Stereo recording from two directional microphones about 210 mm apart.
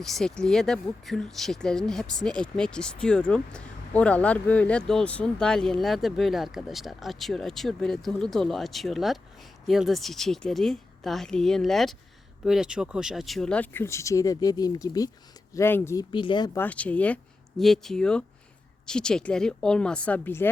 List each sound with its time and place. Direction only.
0.0 s speech: centre (ahead or behind); by 16.5 s 20° left (ahead or behind)
16.6 s speech: 5° left (ahead or behind)